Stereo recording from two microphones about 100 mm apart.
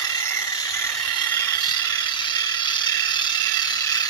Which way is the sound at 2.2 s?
50° left (ahead or behind).